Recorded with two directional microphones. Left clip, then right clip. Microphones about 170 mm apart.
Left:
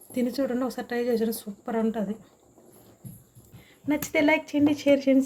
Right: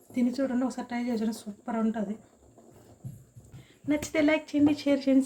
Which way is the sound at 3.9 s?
20° left (ahead or behind).